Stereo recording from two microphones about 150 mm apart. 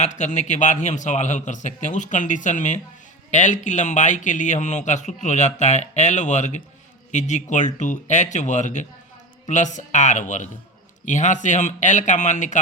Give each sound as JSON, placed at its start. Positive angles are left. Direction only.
{"t": 0.0, "sound": "speech", "side_deg": 55}